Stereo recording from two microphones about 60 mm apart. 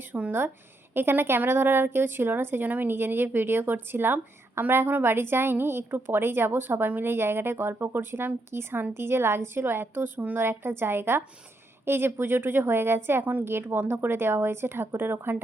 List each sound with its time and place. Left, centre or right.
0.1 s a woman's voice: right